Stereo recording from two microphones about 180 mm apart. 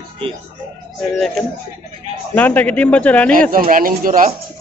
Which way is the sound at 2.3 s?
10° left (ahead or behind).